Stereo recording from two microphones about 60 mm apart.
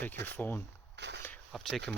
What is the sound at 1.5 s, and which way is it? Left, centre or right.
Speech, centre.